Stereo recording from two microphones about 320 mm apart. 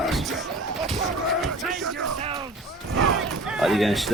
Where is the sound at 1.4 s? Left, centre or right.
Centre.